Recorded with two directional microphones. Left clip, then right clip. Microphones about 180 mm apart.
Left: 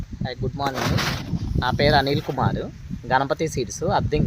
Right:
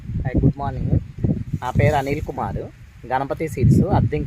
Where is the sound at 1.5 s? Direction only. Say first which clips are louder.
Left 2 dB; 15° right (ahead or behind).